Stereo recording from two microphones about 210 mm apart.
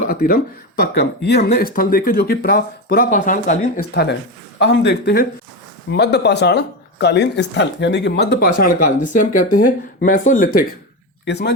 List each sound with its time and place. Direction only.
0.1 s speech: 45° left (ahead or behind)
3.9 s speech: 55° left (ahead or behind)
11.3 s speech: 50° left (ahead or behind)